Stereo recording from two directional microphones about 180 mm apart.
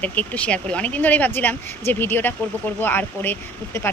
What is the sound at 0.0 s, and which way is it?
Speech, 10° left (ahead or behind).